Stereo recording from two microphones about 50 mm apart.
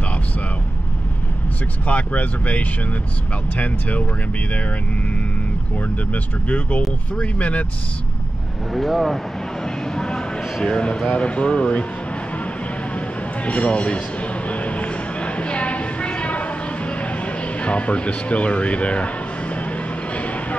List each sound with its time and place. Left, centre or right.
1.9 s speech: left
6.1 s speech: left
8.7 s speech: centre
9.9 s a sound: centre
11.1 s speech: left
13.5 s a sound: left